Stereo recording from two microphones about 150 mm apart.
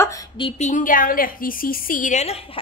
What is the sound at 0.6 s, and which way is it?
A woman's voice, 60° left (ahead or behind).